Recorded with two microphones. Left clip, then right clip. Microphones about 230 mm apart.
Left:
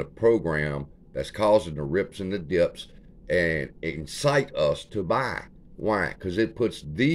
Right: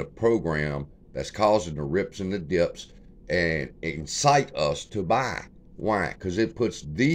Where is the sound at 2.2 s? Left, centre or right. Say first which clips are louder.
Even; centre.